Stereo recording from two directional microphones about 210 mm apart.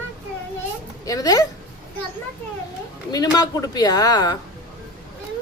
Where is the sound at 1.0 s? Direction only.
15° left (ahead or behind).